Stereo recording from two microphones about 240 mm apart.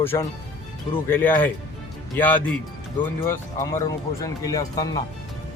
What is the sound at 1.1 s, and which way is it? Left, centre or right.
Speech, centre.